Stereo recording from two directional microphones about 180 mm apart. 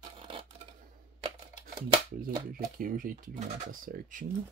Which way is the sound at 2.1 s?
50° right (ahead or behind).